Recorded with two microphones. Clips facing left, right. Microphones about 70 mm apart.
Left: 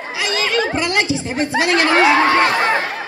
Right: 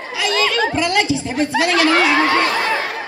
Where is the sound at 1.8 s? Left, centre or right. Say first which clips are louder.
Left 4 dB; centre.